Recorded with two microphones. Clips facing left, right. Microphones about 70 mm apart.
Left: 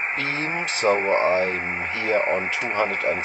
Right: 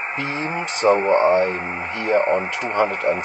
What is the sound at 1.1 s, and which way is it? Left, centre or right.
Speech, centre.